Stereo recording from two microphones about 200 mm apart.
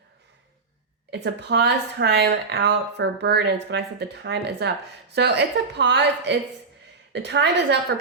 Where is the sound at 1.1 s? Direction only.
55° right (ahead or behind).